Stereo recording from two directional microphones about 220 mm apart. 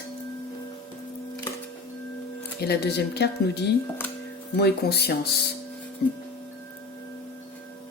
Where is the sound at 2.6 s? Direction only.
45° left (ahead or behind).